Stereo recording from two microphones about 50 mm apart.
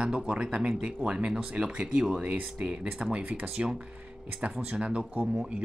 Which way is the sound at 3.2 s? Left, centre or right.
Right.